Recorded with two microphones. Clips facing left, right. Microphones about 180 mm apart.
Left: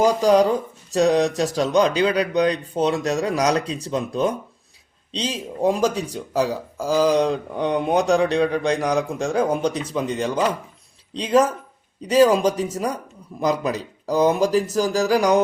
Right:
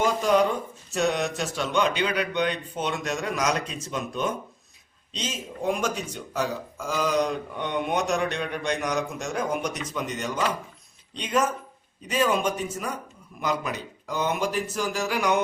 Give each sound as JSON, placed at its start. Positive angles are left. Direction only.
{"t": 0.0, "sound": "speech", "side_deg": 35}